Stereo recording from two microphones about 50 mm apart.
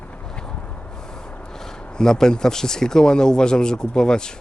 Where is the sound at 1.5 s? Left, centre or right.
Centre.